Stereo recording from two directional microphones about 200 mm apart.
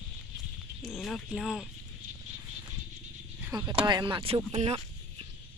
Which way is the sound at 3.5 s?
20° right (ahead or behind).